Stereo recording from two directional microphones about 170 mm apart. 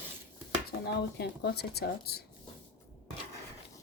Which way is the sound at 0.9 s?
70° left (ahead or behind).